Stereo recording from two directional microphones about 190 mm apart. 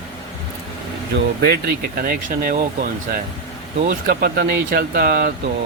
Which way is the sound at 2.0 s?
50° right (ahead or behind).